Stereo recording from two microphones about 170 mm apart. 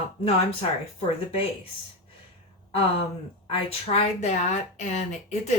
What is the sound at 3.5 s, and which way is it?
A woman's voice, 35° left (ahead or behind).